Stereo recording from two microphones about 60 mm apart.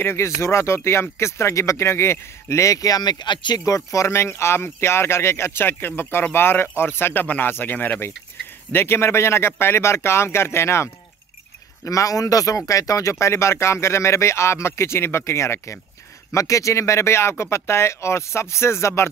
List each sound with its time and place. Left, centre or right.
0.0 s a man's voice: left
8.7 s a man's voice: left
11.8 s a man's voice: left
16.3 s a man's voice: left